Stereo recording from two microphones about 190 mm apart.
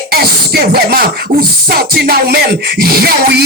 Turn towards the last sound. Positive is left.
turn(degrees=-55)  # may be behind; listen again after turning